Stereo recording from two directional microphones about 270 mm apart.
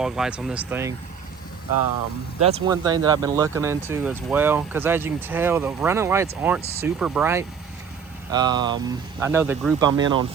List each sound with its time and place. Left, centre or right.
0.0 s speech: centre
2.4 s speech: right